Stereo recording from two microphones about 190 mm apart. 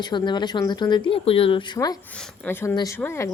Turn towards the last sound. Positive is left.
turn(degrees=15)  # may be behind; listen again after turning